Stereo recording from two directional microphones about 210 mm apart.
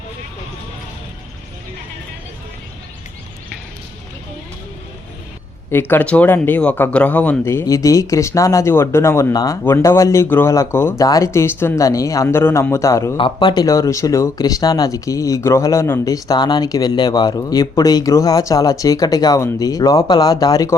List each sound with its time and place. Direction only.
5.9 s speech: 10° left (ahead or behind)